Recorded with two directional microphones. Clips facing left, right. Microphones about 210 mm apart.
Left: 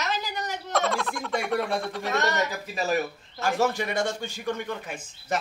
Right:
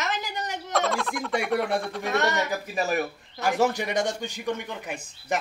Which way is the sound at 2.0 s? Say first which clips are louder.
Even; 15° right (ahead or behind).